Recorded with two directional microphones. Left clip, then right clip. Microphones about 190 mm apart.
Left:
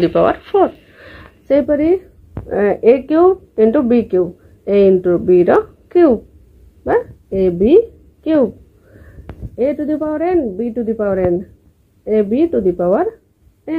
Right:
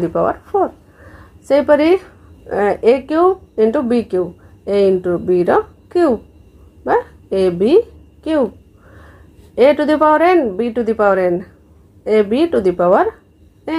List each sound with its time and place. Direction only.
0.0 s speech: 25° left (ahead or behind)
1.5 s a woman's voice: 5° left (ahead or behind)
9.6 s speech: 5° left (ahead or behind)